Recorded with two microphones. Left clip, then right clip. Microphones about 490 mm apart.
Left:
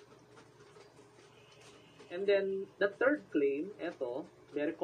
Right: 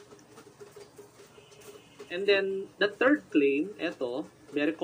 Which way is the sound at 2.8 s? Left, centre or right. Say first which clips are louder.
Right 6 dB; left.